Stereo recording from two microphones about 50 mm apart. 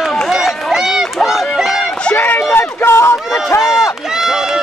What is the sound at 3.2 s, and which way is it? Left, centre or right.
Run, centre.